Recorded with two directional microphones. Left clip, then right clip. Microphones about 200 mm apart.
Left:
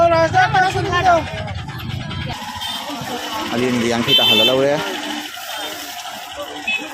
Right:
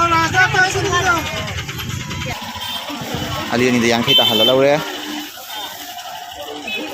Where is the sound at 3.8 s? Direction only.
Centre (ahead or behind).